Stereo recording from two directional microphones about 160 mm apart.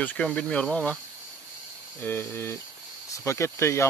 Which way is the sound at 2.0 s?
15° left (ahead or behind).